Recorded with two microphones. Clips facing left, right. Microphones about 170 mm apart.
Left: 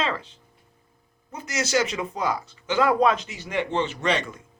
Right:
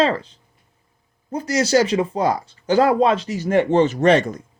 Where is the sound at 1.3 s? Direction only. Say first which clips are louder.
Right 7 dB; 35° right (ahead or behind).